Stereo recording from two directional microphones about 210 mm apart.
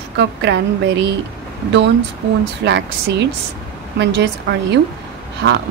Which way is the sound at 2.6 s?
55° right (ahead or behind).